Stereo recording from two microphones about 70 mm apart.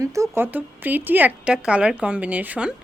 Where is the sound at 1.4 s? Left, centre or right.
Centre.